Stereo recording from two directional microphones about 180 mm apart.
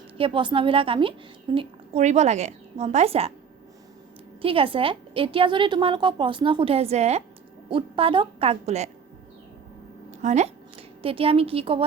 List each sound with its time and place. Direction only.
0.2 s a woman's voice: 30° right (ahead or behind)
4.4 s a woman's voice: 30° right (ahead or behind)
10.1 s a woman's voice: 40° right (ahead or behind)